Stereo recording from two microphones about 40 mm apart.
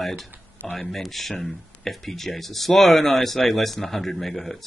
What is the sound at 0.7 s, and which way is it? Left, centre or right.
Speech, centre.